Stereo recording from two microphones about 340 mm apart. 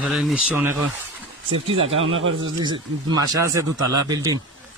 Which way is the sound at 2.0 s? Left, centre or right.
Right.